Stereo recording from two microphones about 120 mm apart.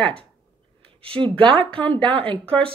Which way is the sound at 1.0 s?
50° right (ahead or behind).